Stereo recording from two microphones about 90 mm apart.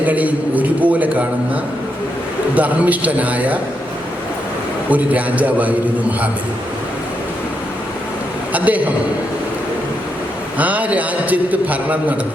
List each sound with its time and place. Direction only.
0.0 s a man's voice: 15° right (ahead or behind)
2.6 s a man's voice: 15° right (ahead or behind)
4.9 s a man's voice: 15° right (ahead or behind)
8.5 s a man's voice: 15° right (ahead or behind)
10.6 s a man's voice: 15° right (ahead or behind)